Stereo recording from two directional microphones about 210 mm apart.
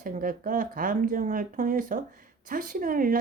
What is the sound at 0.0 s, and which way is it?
A woman's voice, 40° right (ahead or behind).